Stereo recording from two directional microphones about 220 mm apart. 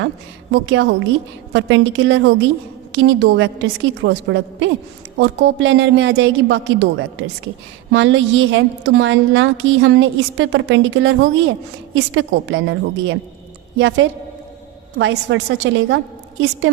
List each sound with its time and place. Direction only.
0.5 s a woman's voice: 55° right (ahead or behind)